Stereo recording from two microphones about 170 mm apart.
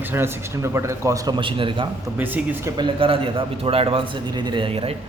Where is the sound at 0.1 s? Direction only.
15° right (ahead or behind); by 1.9 s 30° right (ahead or behind).